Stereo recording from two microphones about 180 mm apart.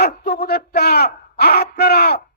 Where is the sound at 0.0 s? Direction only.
60° left (ahead or behind).